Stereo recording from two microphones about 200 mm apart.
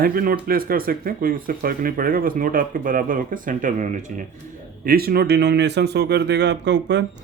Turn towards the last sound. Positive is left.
turn(degrees=-60)  # may be behind; listen again after turning